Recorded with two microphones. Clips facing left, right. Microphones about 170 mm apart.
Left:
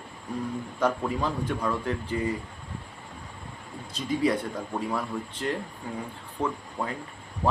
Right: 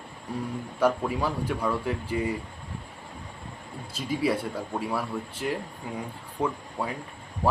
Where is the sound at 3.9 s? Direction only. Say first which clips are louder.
Left 1 dB; 10° right (ahead or behind).